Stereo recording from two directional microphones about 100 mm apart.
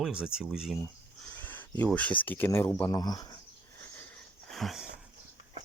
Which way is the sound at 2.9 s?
40° left (ahead or behind).